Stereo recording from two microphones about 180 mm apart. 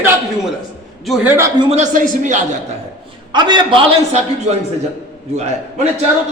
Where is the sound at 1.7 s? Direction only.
45° right (ahead or behind).